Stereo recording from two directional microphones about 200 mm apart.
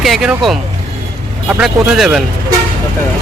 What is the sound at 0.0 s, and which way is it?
Speech, centre (ahead or behind).